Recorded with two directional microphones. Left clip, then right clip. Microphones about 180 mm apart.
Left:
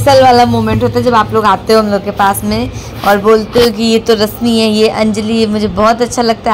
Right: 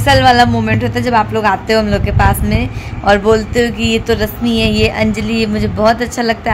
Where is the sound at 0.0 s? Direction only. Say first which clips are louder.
Left 3 dB; 15° left (ahead or behind).